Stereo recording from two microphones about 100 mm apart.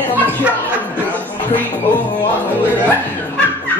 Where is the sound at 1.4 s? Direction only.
20° left (ahead or behind).